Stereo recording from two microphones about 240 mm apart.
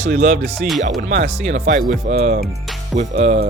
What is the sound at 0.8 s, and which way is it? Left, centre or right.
Speech, right.